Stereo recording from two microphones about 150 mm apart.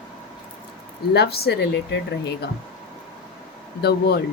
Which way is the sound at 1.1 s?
90° left.